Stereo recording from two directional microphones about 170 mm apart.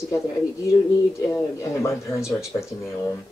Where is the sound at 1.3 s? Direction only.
20° left (ahead or behind).